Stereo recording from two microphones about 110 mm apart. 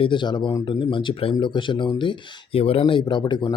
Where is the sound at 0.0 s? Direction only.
45° left (ahead or behind).